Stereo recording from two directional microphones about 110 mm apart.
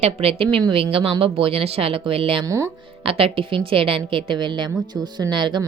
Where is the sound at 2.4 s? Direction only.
25° right (ahead or behind).